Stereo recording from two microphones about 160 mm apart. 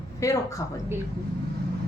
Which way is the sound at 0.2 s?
20° left (ahead or behind).